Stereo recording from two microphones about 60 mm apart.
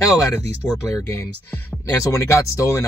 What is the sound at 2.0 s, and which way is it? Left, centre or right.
Speech, left.